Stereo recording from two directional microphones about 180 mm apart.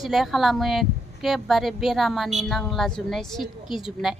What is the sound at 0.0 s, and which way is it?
Speech, centre (ahead or behind).